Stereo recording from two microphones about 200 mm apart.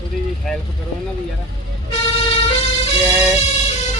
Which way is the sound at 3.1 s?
5° right (ahead or behind).